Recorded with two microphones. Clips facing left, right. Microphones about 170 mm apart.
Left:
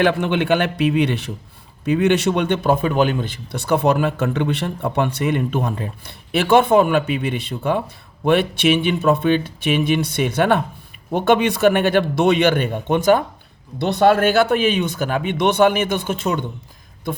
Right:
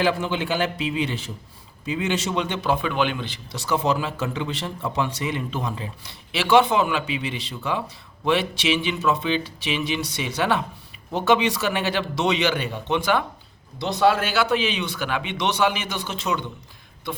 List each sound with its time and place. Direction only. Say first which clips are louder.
0.0 s a man's voice: left 5 dB; 60° left (ahead or behind); by 13.2 s 45° left (ahead or behind)
13.7 s a man's voice: left 5 dB; 60° left (ahead or behind)